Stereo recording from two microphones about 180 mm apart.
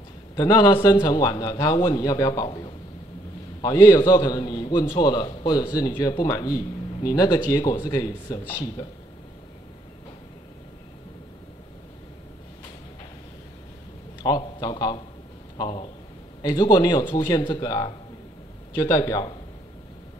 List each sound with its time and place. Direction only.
0.4 s speech: 25° left (ahead or behind)
14.2 s speech: 20° left (ahead or behind)